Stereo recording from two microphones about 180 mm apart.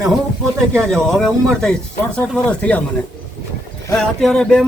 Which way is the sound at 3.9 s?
5° left (ahead or behind).